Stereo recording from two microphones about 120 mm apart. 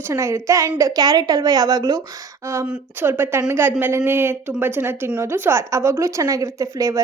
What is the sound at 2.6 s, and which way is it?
A woman's voice, 15° right (ahead or behind).